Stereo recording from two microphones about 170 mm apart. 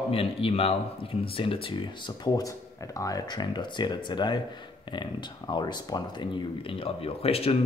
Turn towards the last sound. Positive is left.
turn(degrees=35)  # may be behind; listen again after turning